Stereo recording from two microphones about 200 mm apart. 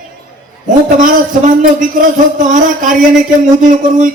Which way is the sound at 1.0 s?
40° right (ahead or behind).